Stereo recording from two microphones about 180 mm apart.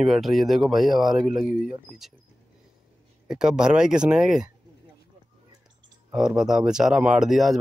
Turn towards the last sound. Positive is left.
turn(degrees=0)  # may be behind; listen again after turning